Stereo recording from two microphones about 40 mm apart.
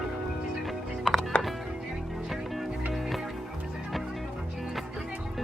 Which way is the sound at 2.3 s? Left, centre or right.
Centre.